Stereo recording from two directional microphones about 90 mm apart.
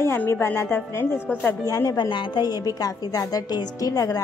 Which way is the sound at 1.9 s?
55° left (ahead or behind).